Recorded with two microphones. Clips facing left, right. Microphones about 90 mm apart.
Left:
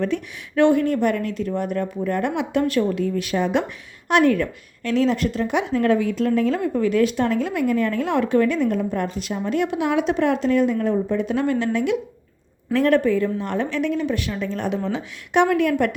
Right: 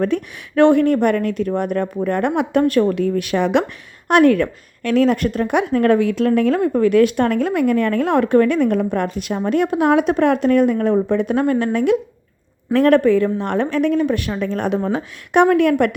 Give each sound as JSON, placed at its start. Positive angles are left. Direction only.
{"t": 0.0, "sound": "a woman's voice", "side_deg": -50}
{"t": 4.1, "sound": "a woman's voice", "side_deg": -55}